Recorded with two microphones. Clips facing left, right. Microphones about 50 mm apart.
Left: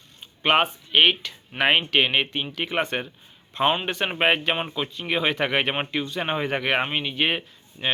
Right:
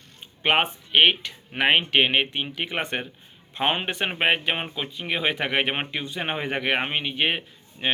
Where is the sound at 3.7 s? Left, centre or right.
Right.